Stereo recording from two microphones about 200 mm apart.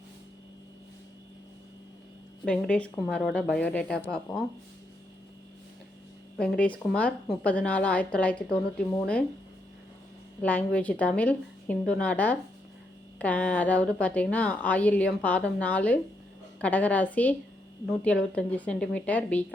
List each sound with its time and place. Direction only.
2.4 s speech: 5° left (ahead or behind)
6.3 s a woman's voice: centre (ahead or behind)
10.4 s a woman's voice: 5° left (ahead or behind)